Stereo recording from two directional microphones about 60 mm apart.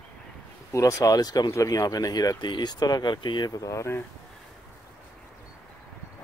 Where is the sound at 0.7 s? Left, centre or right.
Left.